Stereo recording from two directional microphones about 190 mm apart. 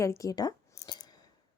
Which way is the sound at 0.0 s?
15° left (ahead or behind).